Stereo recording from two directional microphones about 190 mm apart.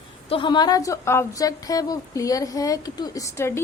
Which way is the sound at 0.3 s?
25° left (ahead or behind).